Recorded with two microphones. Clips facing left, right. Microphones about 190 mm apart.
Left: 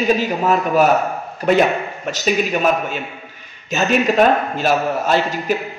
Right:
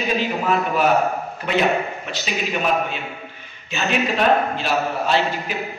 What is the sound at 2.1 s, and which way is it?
A man's voice, 45° left (ahead or behind).